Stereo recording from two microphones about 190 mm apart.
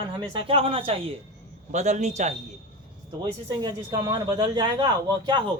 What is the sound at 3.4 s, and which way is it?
Speech, 20° right (ahead or behind).